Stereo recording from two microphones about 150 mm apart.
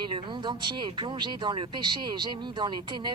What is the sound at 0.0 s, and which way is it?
Speech, 30° right (ahead or behind).